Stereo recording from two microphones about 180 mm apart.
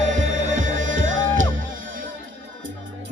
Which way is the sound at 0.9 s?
90° right.